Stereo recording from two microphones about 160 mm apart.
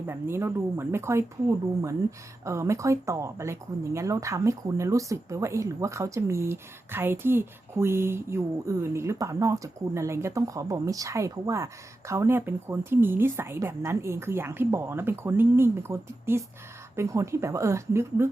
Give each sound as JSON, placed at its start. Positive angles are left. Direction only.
{"t": 0.1, "sound": "speech", "side_deg": -15}